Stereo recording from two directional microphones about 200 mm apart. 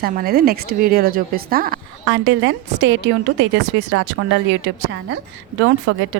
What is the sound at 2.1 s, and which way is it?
A woman's voice, 65° right (ahead or behind).